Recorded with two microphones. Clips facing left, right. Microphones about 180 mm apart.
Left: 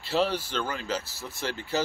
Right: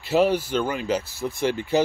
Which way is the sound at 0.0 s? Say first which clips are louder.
Right 7 dB; 10° right (ahead or behind).